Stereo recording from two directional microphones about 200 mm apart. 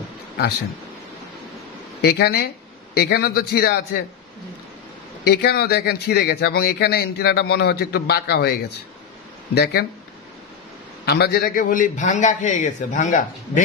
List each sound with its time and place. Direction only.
2.0 s speech: 55° left (ahead or behind)
5.2 s speech: 55° left (ahead or behind)
9.6 s speech: 50° left (ahead or behind)
11.1 s a man's voice: 50° left (ahead or behind)